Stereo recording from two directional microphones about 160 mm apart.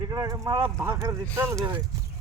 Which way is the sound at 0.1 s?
20° right (ahead or behind).